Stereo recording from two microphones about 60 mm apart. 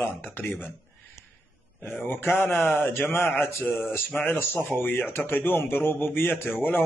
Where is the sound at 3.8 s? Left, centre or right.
Left.